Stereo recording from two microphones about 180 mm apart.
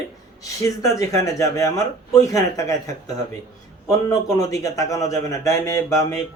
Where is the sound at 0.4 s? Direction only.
20° left (ahead or behind).